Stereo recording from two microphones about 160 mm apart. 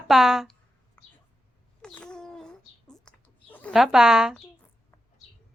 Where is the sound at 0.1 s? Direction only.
Centre (ahead or behind).